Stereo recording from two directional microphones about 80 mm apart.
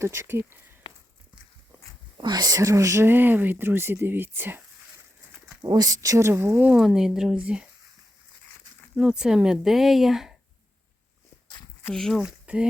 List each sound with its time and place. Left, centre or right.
0.0 s speech: right
2.2 s speech: right
5.6 s speech: right
6.7 s speech: centre
9.0 s speech: centre
11.9 s speech: centre
12.2 s speech: centre